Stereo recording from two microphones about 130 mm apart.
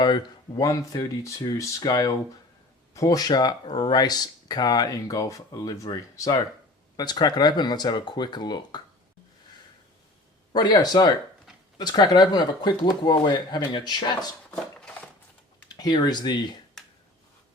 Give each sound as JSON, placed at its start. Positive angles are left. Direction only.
{"t": 0.0, "sound": "speech", "side_deg": 35}
{"t": 10.5, "sound": "speech", "side_deg": 30}
{"t": 14.5, "sound": "a sound", "side_deg": 10}
{"t": 15.7, "sound": "speech", "side_deg": 35}